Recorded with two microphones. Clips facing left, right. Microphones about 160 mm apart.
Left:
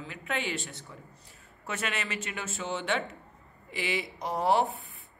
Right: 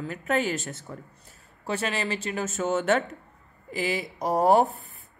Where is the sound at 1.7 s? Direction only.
35° right (ahead or behind).